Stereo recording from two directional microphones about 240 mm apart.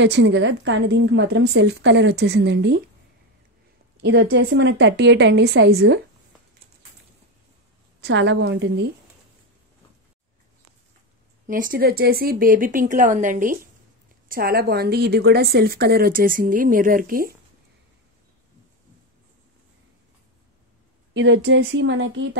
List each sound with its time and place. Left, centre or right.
0.0 s a woman's voice: right
4.0 s a woman's voice: right
8.0 s a woman's voice: right
11.4 s a woman's voice: right
21.1 s a woman's voice: right